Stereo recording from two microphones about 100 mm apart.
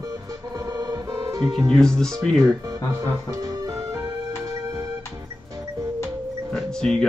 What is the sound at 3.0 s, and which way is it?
Music, 40° right (ahead or behind).